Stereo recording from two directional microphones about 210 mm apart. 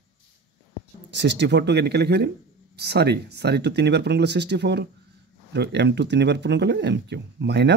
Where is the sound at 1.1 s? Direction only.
55° right (ahead or behind).